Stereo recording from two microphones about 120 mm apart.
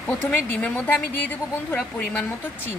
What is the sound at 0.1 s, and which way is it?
Speech, 10° left (ahead or behind).